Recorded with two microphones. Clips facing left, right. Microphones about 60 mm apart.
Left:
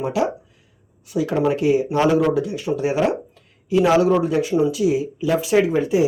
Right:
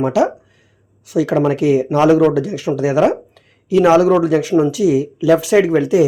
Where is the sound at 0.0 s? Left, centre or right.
Right.